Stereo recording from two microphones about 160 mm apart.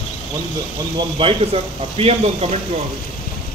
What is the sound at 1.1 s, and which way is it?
Speech, 35° right (ahead or behind).